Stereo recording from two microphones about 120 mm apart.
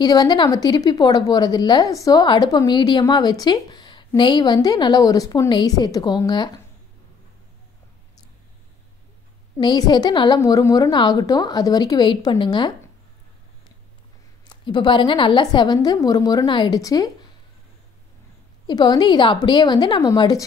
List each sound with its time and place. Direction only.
0.0 s a woman's voice: 35° left (ahead or behind)
9.6 s a woman's voice: 40° left (ahead or behind)
14.5 s a woman's voice: 40° left (ahead or behind)
18.7 s a woman's voice: 35° left (ahead or behind)